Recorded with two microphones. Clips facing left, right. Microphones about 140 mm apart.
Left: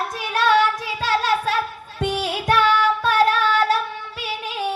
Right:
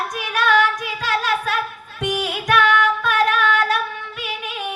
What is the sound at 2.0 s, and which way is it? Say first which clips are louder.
Music: even; 30° left (ahead or behind).